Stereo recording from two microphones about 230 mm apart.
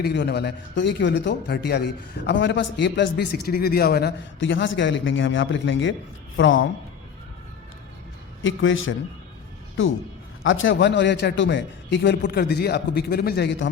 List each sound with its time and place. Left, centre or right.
0.0 s a man's voice: left
8.4 s a man's voice: left
10.4 s a man's voice: left